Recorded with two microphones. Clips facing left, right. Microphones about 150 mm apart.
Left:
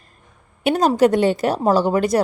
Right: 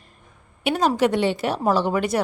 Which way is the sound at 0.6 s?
40° left (ahead or behind).